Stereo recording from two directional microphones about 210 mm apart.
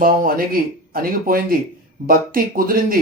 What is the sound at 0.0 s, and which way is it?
Speech, 45° right (ahead or behind).